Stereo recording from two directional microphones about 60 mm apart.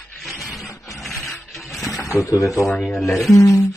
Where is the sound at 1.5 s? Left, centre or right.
Centre.